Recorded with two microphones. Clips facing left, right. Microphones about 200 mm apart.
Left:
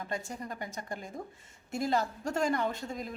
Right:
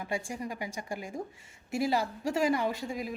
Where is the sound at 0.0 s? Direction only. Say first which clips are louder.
Right 3 dB; 10° right (ahead or behind).